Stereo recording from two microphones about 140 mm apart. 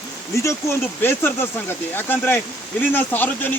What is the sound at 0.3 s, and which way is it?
Speech, 20° left (ahead or behind).